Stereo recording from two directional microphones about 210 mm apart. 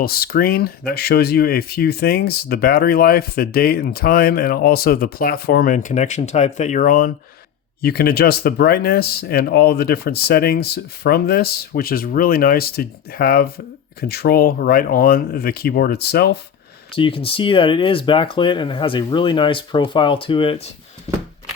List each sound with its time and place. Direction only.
0.0 s speech: 45° left (ahead or behind)
16.9 s speech: 25° left (ahead or behind)